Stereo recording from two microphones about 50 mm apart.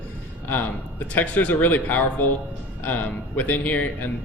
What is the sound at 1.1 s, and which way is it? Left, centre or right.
A man's voice, left.